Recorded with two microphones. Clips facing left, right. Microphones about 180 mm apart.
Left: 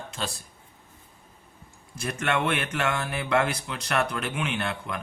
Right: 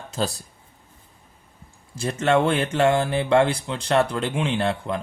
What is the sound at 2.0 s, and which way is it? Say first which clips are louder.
Speech: right 7 dB; 30° right (ahead or behind).